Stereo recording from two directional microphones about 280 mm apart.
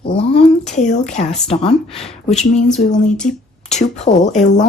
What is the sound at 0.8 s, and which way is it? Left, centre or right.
Speech, left.